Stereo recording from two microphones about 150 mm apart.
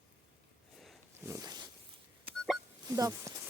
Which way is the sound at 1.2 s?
25° right (ahead or behind).